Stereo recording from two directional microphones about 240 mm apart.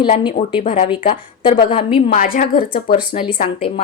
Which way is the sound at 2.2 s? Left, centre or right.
Left.